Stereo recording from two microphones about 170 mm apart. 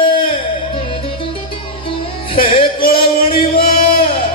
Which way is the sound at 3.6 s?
60° left (ahead or behind).